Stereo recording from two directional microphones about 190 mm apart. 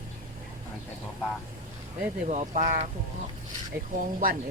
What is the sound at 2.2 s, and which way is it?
Speech, 40° right (ahead or behind).